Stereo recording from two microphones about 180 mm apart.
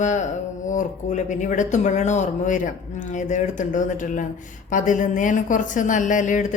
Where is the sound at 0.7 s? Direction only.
45° left (ahead or behind).